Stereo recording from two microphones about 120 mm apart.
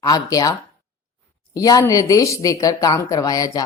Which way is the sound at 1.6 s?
30° left (ahead or behind).